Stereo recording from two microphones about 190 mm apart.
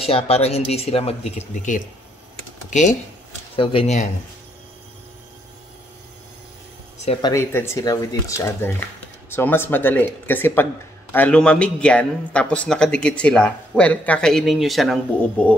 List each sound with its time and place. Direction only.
0.0 s speech: 30° left (ahead or behind)
2.7 s speech: 40° left (ahead or behind)
3.5 s speech: 30° left (ahead or behind)
7.1 s speech: 20° left (ahead or behind); by 15.0 s centre (ahead or behind)